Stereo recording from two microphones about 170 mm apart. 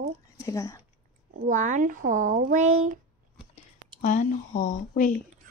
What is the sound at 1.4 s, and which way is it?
Speech, 45° right (ahead or behind).